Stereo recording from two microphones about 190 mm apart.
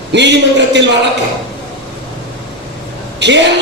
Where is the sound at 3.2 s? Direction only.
70° right (ahead or behind).